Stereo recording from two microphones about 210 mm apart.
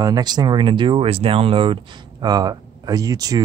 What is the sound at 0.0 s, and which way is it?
Speech, 20° right (ahead or behind).